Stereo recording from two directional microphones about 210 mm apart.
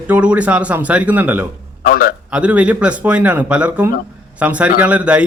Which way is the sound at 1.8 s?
45° left (ahead or behind).